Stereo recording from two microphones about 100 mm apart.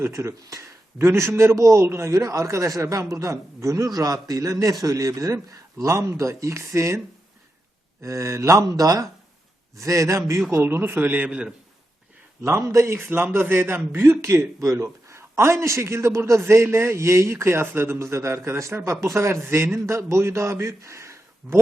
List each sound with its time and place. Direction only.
0.0 s a man's voice: 30° right (ahead or behind)
8.0 s a man's voice: 30° right (ahead or behind); by 11.5 s 10° right (ahead or behind)
12.4 s a man's voice: 30° right (ahead or behind)